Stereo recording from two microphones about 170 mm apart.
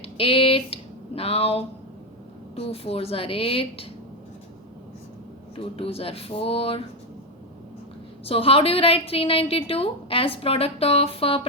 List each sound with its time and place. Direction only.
0.0 s a woman's voice: 35° left (ahead or behind)
5.5 s a woman's voice: 35° left (ahead or behind)
8.2 s a woman's voice: 35° left (ahead or behind)